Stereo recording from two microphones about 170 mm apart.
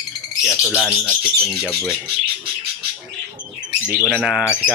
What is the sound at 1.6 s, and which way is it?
Speech, 10° left (ahead or behind).